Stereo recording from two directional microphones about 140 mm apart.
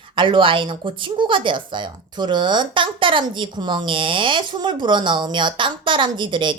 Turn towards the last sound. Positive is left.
turn(degrees=-35)  # may be behind; listen again after turning